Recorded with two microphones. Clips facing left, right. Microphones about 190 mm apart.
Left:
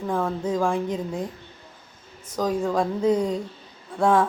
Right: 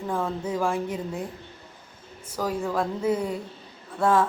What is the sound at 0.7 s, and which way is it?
Speech, 5° right (ahead or behind).